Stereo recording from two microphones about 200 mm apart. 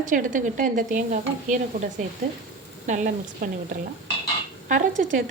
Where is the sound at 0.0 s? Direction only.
40° right (ahead or behind).